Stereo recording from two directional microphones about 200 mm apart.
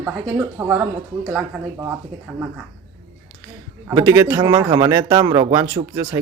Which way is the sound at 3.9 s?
15° right (ahead or behind).